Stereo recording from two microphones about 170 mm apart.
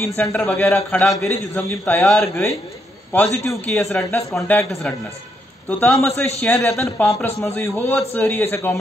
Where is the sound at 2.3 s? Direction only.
15° left (ahead or behind).